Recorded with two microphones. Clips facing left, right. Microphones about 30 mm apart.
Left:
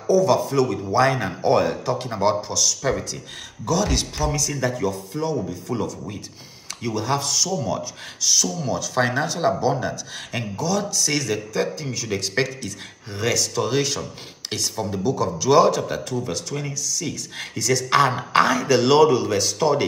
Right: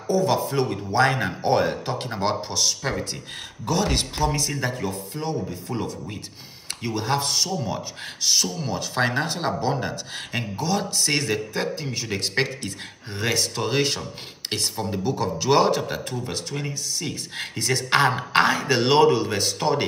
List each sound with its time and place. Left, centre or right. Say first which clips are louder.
0.0 s speech: left 4 dB; right
0.8 s speech: left 1 dB; centre
5.7 s speech: left 3 dB; centre
6.8 s speech: left 1 dB; right